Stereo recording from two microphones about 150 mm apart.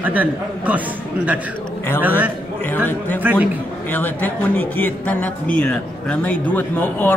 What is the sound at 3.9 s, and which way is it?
A man's voice, 10° left (ahead or behind).